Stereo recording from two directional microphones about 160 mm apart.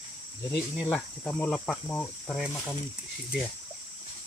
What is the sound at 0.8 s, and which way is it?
Speech, 10° left (ahead or behind).